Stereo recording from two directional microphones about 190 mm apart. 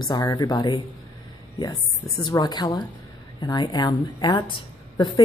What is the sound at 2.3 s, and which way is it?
Speech, 20° left (ahead or behind).